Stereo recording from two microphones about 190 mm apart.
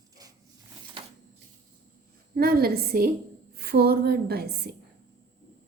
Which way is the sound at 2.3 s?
55° right (ahead or behind).